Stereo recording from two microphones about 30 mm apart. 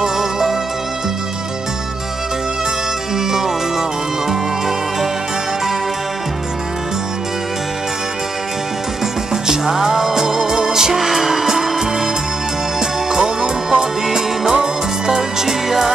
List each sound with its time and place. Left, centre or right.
0.0 s music: centre
3.2 s music: centre
9.0 s music: centre
11.0 s music: centre
14.0 s music: centre